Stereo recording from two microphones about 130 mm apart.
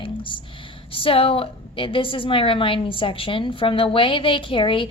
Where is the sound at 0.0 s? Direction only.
40° left (ahead or behind).